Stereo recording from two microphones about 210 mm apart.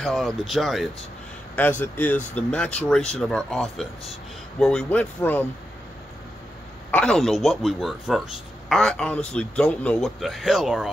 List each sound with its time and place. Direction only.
0.0 s speech: centre (ahead or behind)
6.9 s speech: 5° left (ahead or behind)